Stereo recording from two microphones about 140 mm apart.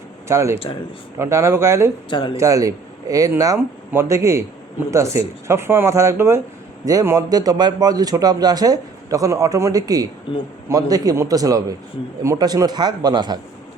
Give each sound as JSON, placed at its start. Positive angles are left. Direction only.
{"t": 0.3, "sound": "a man's voice", "side_deg": -20}
{"t": 2.0, "sound": "speech", "side_deg": 35}
{"t": 2.3, "sound": "a man's voice", "side_deg": -25}
{"t": 10.3, "sound": "speech", "side_deg": 40}
{"t": 10.7, "sound": "a man's voice", "side_deg": -25}